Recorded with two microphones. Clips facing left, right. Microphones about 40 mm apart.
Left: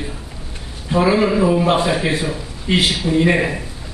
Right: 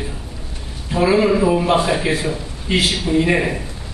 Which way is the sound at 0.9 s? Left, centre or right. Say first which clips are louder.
Even; centre.